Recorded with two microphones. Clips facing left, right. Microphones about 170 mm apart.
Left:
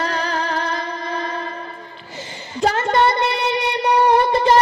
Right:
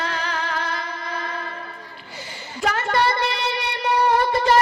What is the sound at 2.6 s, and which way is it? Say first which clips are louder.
Child singing: left 4 dB; 30° left (ahead or behind).